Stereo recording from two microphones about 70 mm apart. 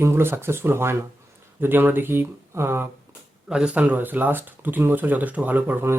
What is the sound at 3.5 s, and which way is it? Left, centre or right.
Speech, centre.